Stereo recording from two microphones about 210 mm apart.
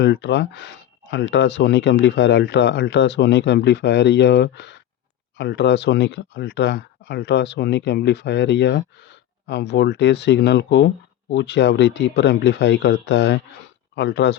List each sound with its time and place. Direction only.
0.0 s speech: 55° left (ahead or behind)